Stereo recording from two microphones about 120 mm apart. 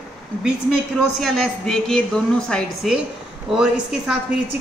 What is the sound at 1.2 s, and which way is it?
A woman's voice, 5° left (ahead or behind).